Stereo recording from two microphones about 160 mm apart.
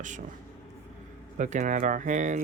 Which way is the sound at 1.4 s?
50° right (ahead or behind).